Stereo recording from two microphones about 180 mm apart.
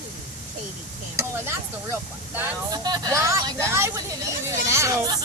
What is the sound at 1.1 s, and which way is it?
Speech, 15° right (ahead or behind).